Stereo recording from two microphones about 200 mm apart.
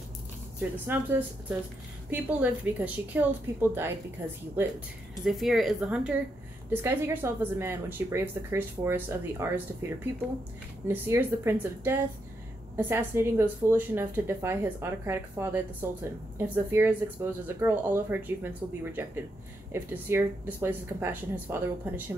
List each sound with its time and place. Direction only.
0.6 s a woman's voice: 10° right (ahead or behind)
10.9 s a woman's voice: 10° right (ahead or behind)
19.7 s a woman's voice: 10° right (ahead or behind)